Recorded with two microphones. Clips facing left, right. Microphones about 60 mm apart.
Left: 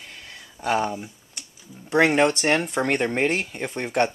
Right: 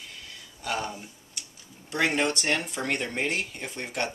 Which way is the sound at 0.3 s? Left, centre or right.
Left.